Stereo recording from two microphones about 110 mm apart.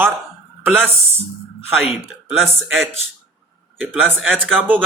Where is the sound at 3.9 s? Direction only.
15° right (ahead or behind).